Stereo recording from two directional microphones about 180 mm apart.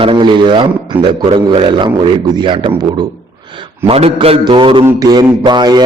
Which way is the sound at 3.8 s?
35° right (ahead or behind).